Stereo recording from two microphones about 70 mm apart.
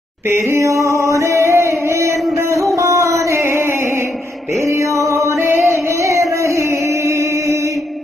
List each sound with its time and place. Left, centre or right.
0.3 s singing: right
4.6 s music: right